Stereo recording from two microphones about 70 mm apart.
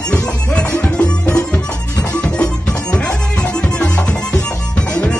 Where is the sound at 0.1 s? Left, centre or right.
Centre.